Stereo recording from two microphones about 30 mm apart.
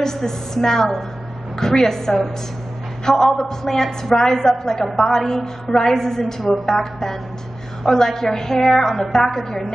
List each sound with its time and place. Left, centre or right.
0.0 s a woman's voice: centre